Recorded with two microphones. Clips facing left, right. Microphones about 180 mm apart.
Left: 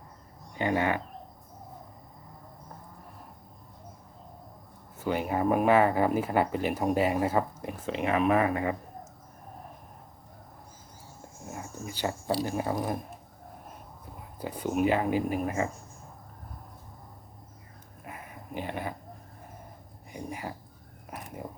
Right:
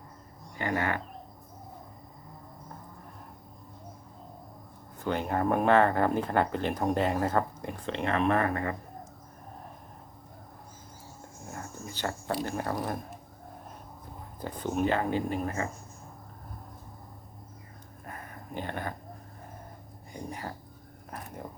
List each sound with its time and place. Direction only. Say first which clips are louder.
0.5 s speech: left 3 dB; 20° left (ahead or behind)
4.9 s speech: left 1 dB; 5° left (ahead or behind)
11.5 s a sound: left 2 dB; 10° left (ahead or behind)
12.4 s speech: left 1 dB; 10° left (ahead or behind)
14.3 s speech: left 2 dB; 10° left (ahead or behind)
18.0 s a sound: even; 10° left (ahead or behind)
20.1 s speech: left 1 dB; 10° left (ahead or behind)